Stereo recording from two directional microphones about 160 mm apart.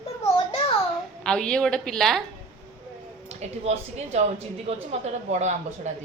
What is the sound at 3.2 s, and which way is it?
Speech, 40° right (ahead or behind).